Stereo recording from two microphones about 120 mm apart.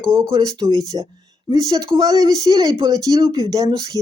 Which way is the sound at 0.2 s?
35° right (ahead or behind).